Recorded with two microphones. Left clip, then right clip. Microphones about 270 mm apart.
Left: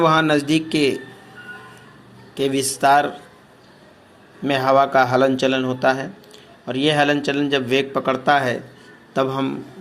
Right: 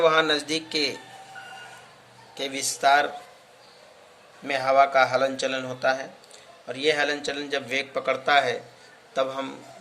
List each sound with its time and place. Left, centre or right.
0.0 s a man's voice: centre
2.3 s a man's voice: centre
4.4 s a man's voice: centre